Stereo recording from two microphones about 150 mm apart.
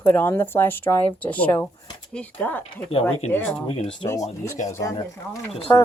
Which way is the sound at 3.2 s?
45° left (ahead or behind).